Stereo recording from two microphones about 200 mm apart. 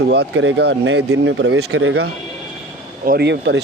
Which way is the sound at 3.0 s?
55° right (ahead or behind).